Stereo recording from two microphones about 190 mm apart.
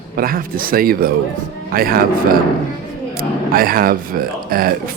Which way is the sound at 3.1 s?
50° right (ahead or behind).